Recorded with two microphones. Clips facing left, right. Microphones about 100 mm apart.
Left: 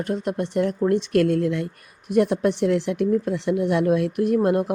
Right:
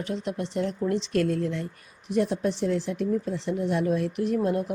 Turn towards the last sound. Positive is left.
turn(degrees=65)  # may be behind; listen again after turning